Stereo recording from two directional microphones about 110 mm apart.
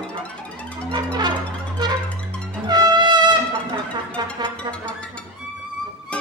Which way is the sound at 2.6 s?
40° right (ahead or behind).